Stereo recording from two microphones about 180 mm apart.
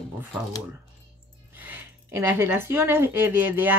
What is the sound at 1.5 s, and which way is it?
Speech, 10° right (ahead or behind).